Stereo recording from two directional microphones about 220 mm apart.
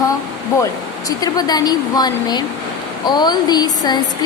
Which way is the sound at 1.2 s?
20° left (ahead or behind).